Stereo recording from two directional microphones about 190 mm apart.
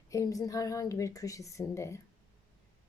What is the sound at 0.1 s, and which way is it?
A woman's voice, 15° left (ahead or behind).